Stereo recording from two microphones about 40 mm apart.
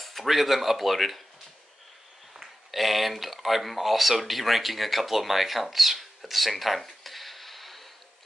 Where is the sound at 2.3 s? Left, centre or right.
Centre.